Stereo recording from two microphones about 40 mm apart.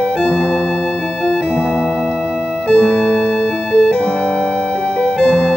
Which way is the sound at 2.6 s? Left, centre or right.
Centre.